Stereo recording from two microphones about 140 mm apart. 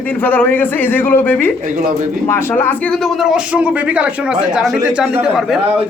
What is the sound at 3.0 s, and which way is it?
A man's voice, centre (ahead or behind).